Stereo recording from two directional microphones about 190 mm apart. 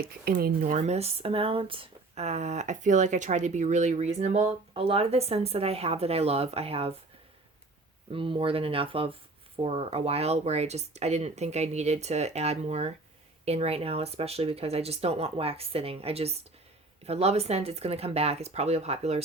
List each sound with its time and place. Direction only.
0.0 s speech: 55° right (ahead or behind); by 6.9 s 30° right (ahead or behind)
8.1 s speech: 30° right (ahead or behind)